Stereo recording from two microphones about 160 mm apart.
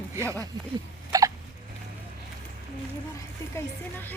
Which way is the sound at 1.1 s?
25° right (ahead or behind).